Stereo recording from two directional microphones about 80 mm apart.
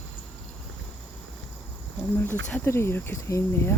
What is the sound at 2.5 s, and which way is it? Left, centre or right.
Speech, left.